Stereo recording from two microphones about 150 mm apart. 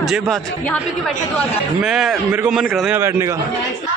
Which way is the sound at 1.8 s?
5° right (ahead or behind).